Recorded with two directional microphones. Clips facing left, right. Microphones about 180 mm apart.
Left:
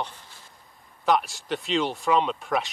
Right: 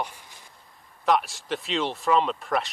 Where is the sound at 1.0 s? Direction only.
Centre (ahead or behind).